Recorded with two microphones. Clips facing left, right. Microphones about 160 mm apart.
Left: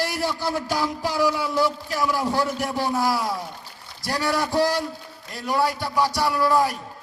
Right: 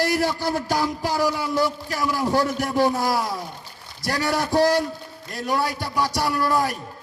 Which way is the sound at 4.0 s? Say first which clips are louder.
Right 1 dB; 50° right (ahead or behind).